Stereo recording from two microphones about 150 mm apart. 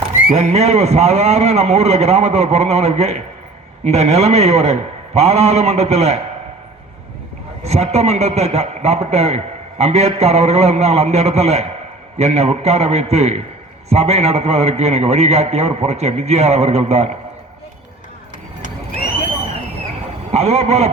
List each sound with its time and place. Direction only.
0.3 s a man's voice: 45° right (ahead or behind)
7.6 s a man's voice: 45° right (ahead or behind)
20.3 s a man's voice: 45° right (ahead or behind)